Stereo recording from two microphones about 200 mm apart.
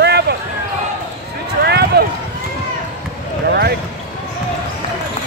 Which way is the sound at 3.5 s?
55° right (ahead or behind).